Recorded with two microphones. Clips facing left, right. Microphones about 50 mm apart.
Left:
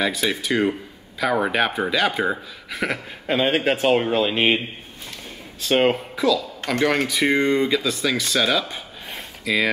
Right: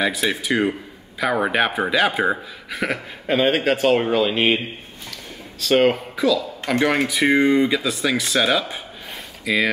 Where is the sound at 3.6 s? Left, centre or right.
Centre.